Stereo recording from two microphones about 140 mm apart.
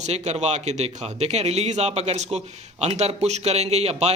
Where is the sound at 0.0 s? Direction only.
55° right (ahead or behind).